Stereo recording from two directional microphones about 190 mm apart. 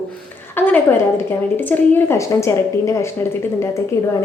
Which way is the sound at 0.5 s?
10° left (ahead or behind).